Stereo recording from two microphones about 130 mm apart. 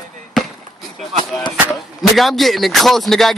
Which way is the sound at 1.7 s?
Centre (ahead or behind).